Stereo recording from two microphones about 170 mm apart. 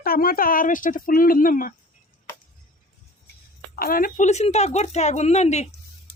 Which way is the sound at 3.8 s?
60° left (ahead or behind).